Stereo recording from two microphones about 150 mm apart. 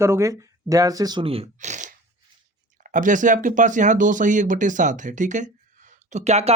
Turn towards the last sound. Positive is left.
turn(degrees=-45)  # may be behind; listen again after turning